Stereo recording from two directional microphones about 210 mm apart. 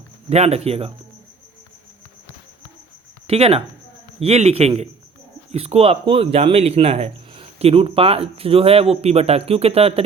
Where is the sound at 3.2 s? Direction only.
30° right (ahead or behind).